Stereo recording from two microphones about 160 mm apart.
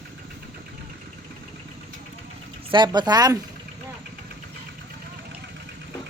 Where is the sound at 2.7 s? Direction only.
30° right (ahead or behind).